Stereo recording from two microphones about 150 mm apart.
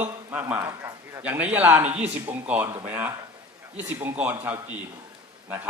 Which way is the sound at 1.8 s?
45° right (ahead or behind).